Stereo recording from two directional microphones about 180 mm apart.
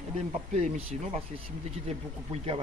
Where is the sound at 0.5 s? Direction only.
40° right (ahead or behind).